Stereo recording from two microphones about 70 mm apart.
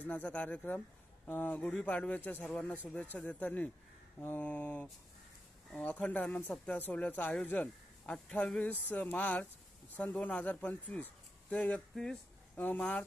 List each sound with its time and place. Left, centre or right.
0.0 s a man's voice: left
8.6 s a man's voice: left
11.9 s speech: centre
12.5 s speech: left